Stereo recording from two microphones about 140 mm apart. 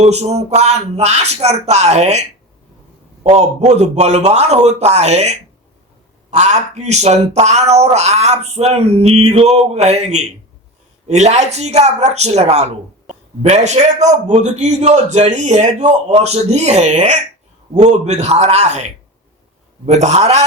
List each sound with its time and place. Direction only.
0.0 s speech: 50° right (ahead or behind)
3.2 s a man's voice: 50° right (ahead or behind)